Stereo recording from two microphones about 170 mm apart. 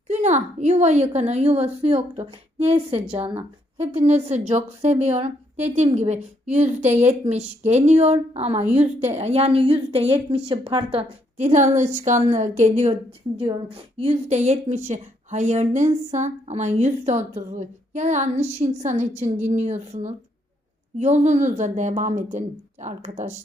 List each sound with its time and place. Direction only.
0.1 s a woman's voice: 45° right (ahead or behind)
12.9 s a woman's voice: 30° right (ahead or behind)